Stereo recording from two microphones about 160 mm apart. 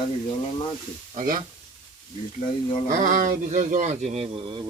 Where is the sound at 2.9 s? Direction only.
60° right (ahead or behind); by 4.6 s 35° right (ahead or behind).